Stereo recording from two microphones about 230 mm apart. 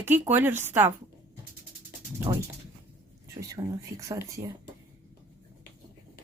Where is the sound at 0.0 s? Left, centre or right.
Centre.